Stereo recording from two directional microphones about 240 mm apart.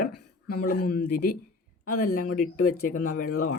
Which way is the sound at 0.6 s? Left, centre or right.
Left.